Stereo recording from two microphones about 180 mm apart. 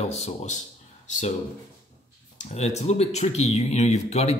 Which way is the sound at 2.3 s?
40° left (ahead or behind).